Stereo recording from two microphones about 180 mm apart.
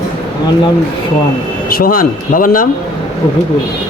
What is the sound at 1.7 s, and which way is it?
Speech, 55° left (ahead or behind).